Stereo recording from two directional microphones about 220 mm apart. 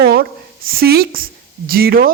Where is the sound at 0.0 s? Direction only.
45° right (ahead or behind).